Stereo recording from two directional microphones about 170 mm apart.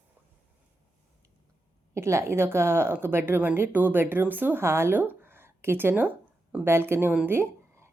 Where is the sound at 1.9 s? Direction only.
15° right (ahead or behind).